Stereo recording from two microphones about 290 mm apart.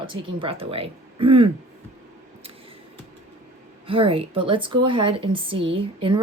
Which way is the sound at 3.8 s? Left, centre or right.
Centre.